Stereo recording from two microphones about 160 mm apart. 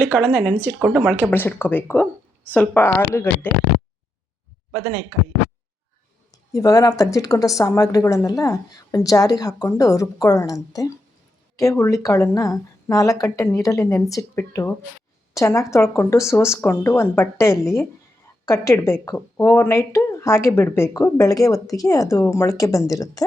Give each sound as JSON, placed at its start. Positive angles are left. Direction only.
{"t": 0.3, "sound": "speech", "side_deg": -5}
{"t": 1.1, "sound": "speech", "side_deg": 15}
{"t": 6.3, "sound": "a woman's voice", "side_deg": 20}